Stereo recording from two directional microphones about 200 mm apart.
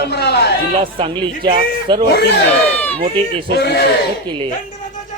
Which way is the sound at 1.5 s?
25° right (ahead or behind).